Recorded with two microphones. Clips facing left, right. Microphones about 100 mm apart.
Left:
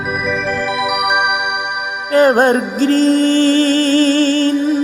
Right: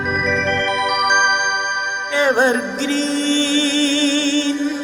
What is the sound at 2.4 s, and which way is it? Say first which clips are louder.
Music: left 4 dB; 45° left (ahead or behind).